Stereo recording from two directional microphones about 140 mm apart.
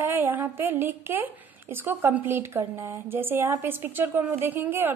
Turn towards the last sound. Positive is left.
turn(degrees=-15)  # may be behind; listen again after turning